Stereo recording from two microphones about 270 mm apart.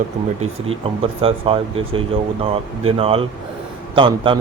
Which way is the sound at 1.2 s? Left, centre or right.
Right.